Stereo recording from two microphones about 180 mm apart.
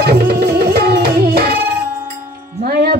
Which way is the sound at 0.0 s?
60° right (ahead or behind).